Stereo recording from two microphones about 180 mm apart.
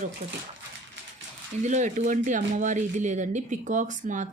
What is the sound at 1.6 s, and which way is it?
Speech, 40° right (ahead or behind).